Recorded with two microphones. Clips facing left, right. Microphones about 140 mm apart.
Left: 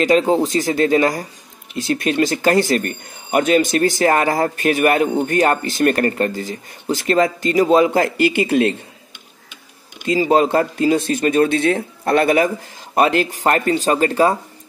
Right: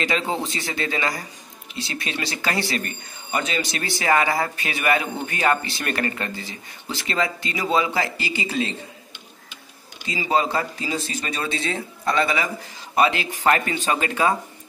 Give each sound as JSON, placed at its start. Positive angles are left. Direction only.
{"t": 0.0, "sound": "speech", "side_deg": 40}
{"t": 10.0, "sound": "speech", "side_deg": 45}